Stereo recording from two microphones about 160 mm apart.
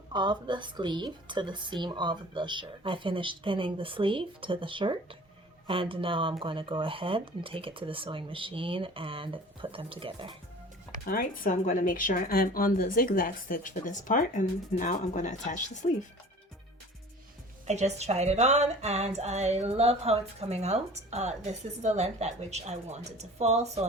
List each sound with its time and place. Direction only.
0.1 s a woman's voice: 30° right (ahead or behind)
11.0 s speech: 65° left (ahead or behind); by 16.0 s 50° left (ahead or behind)
17.7 s speech: 45° right (ahead or behind)